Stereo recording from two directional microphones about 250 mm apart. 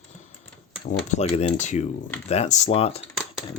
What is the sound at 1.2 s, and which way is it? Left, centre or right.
Speech, left.